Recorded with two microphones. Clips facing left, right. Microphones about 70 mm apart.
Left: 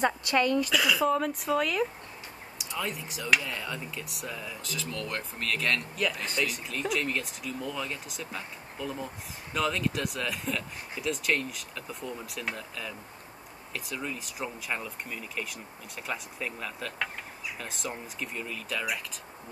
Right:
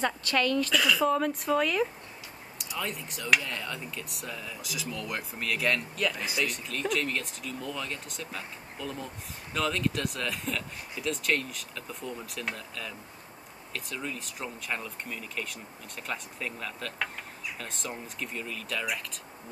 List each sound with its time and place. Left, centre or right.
0.0 s a woman's voice: centre
0.7 s speech: centre
4.6 s speech: centre